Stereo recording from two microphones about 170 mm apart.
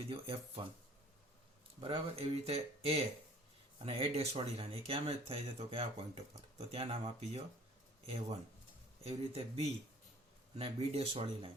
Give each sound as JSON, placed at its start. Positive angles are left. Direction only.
{"t": 0.1, "sound": "speech", "side_deg": -35}
{"t": 1.8, "sound": "speech", "side_deg": -35}